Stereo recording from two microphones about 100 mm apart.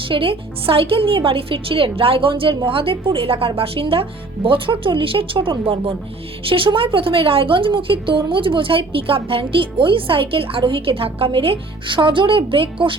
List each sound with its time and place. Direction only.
0.1 s a woman's voice: 60° right (ahead or behind)